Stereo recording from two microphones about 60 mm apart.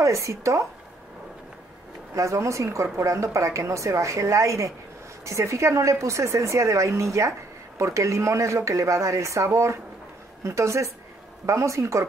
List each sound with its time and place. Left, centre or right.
0.0 s speech: right
2.1 s speech: right